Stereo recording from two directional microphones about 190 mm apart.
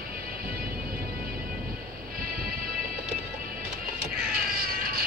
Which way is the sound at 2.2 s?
50° right (ahead or behind).